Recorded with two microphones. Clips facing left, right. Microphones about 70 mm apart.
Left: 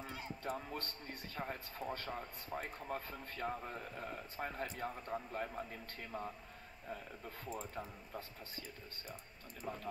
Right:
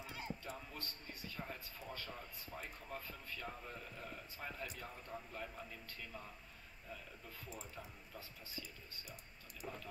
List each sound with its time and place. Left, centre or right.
0.4 s speech: left